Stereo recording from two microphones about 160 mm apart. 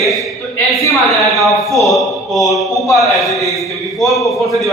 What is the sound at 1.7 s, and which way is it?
A man's voice, centre (ahead or behind).